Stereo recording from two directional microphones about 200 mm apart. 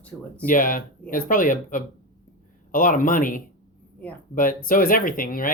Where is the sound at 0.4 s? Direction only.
45° left (ahead or behind).